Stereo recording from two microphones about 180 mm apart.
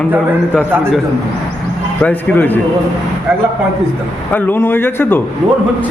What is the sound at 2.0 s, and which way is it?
Speech, 10° left (ahead or behind).